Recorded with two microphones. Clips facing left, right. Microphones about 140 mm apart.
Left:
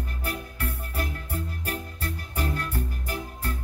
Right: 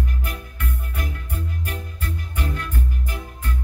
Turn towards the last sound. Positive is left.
turn(degrees=35)  # may be behind; listen again after turning